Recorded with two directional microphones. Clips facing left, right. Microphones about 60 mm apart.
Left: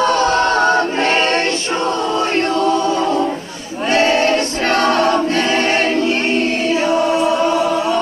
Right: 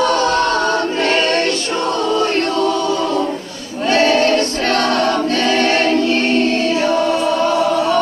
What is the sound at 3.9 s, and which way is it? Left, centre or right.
Choir, left.